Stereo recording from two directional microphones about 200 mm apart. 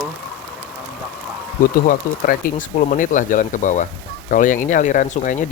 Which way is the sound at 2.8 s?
40° left (ahead or behind).